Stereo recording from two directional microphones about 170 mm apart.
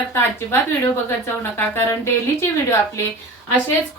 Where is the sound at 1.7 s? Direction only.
15° left (ahead or behind).